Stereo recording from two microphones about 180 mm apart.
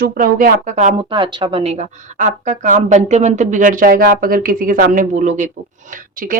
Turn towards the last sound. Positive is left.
turn(degrees=-50)  # may be behind; listen again after turning